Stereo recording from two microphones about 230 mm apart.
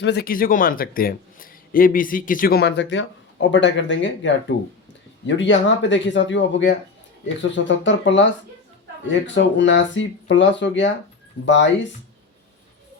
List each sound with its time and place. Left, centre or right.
0.0 s speech: left